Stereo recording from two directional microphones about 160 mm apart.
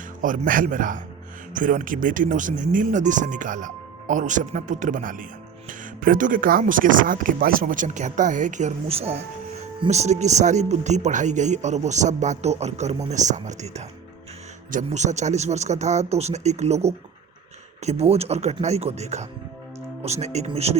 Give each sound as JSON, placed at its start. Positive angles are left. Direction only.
{"t": 0.2, "sound": "speech", "side_deg": -55}